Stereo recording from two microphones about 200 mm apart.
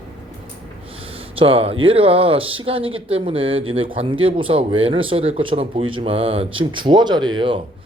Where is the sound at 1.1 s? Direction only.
25° right (ahead or behind).